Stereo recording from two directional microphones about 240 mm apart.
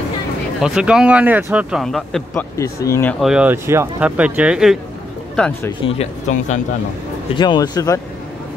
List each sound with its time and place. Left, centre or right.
0.6 s speech: centre
2.5 s speech: centre
5.8 s speech: left
7.3 s speech: centre